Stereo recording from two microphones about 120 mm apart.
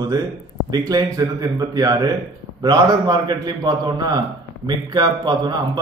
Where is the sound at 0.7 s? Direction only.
30° right (ahead or behind).